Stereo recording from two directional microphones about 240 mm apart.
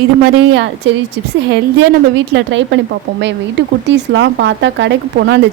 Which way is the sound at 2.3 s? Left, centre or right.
Right.